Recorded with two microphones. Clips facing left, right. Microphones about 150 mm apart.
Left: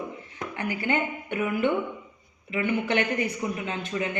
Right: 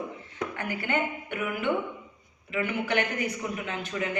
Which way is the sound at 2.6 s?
20° left (ahead or behind).